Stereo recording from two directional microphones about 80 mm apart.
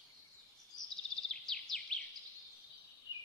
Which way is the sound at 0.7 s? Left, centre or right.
Left.